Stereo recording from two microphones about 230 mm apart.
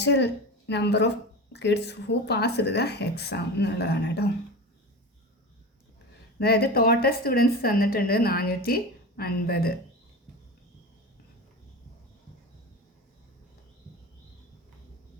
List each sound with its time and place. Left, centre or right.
0.0 s a woman's voice: left
6.4 s a woman's voice: left